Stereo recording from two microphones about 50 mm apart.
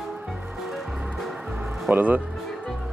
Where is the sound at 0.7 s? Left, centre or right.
Centre.